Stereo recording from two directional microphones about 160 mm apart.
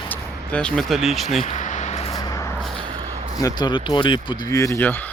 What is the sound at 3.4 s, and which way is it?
Speech, 25° left (ahead or behind).